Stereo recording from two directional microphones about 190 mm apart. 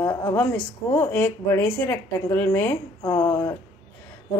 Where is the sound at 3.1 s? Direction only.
25° left (ahead or behind).